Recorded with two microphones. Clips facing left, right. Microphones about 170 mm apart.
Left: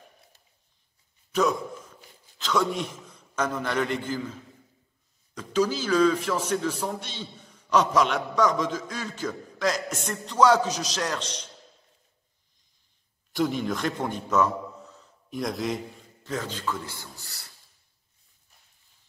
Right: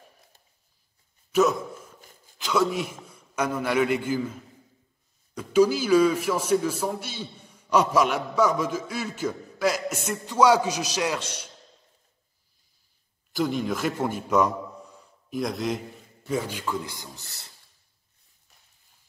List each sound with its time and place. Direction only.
1.3 s a sound: 5° right (ahead or behind)
2.3 s a man's voice: 10° right (ahead or behind)
13.3 s a man's voice: centre (ahead or behind)
15.3 s a man's voice: centre (ahead or behind)
16.3 s a man's voice: 10° right (ahead or behind)